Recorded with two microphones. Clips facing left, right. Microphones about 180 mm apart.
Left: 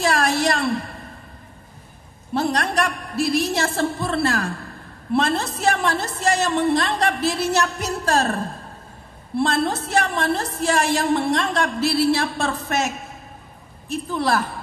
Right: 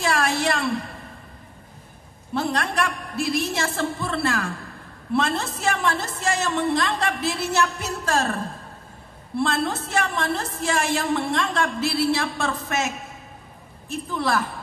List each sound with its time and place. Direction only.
0.0 s a sound: 40° left (ahead or behind)
2.3 s a woman's voice: 40° left (ahead or behind)
9.4 s a woman's voice: 40° left (ahead or behind)
14.1 s a woman's voice: 35° left (ahead or behind)